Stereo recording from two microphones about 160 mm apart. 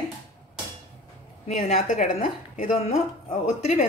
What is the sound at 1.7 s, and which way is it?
Speech, 55° left (ahead or behind).